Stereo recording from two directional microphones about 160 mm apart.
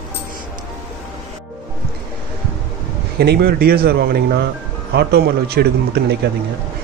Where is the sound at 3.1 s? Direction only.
80° right.